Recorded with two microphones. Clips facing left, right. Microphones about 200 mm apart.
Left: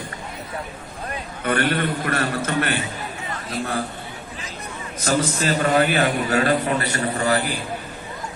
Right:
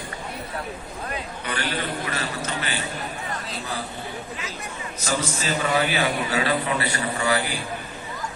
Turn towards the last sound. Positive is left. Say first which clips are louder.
# left 3 dB
turn(degrees=40)  # may be behind; listen again after turning